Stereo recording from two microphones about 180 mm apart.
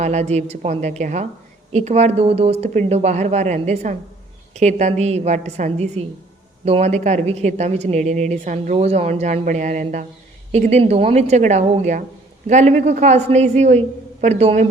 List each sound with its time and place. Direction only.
0.0 s speech: 40° right (ahead or behind)